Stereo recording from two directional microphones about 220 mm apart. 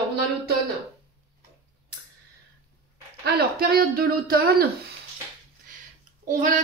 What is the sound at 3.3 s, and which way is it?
Speech, 45° right (ahead or behind).